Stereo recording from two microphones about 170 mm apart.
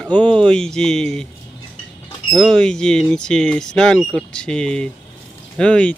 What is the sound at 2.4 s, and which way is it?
Speech, 5° left (ahead or behind).